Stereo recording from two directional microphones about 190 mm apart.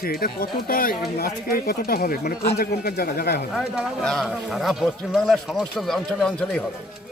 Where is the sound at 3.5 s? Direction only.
5° right (ahead or behind).